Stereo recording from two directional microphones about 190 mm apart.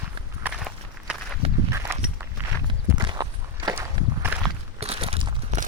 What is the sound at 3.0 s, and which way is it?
Walk, 20° right (ahead or behind).